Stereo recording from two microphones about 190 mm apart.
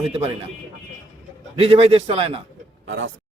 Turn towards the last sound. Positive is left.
turn(degrees=-80)